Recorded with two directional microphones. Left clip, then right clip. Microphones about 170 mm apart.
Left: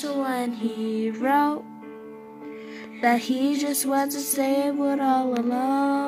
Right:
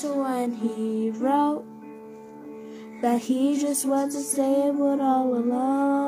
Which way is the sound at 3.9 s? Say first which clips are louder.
Left 2 dB; 10° left (ahead or behind).